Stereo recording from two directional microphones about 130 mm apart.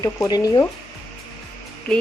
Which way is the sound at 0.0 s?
30° left (ahead or behind).